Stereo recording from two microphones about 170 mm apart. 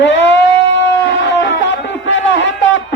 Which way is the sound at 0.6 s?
90° left.